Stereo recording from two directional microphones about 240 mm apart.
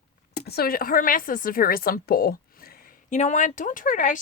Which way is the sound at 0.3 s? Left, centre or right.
Left.